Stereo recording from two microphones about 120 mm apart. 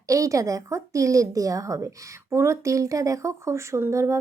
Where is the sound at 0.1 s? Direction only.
25° right (ahead or behind).